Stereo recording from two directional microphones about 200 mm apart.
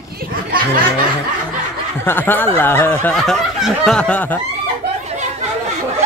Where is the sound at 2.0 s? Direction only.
10° left (ahead or behind).